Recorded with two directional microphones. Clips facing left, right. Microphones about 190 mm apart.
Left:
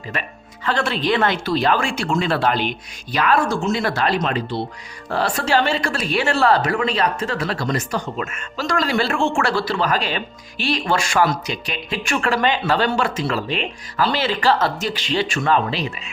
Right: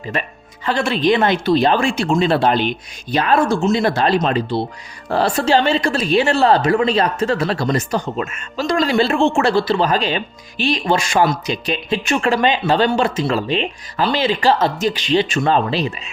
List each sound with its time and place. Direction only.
0.6 s a woman's voice: 10° right (ahead or behind)